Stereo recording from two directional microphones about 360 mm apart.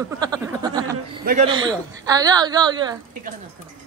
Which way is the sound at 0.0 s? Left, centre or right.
Centre.